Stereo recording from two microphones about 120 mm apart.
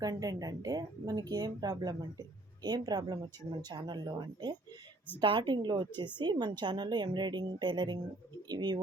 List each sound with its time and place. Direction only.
0.0 s speech: 30° right (ahead or behind)